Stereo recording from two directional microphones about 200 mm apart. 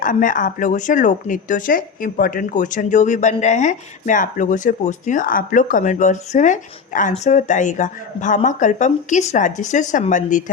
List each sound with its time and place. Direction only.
0.0 s speech: 40° left (ahead or behind)